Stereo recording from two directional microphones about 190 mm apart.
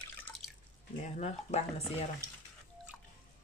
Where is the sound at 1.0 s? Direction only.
35° left (ahead or behind).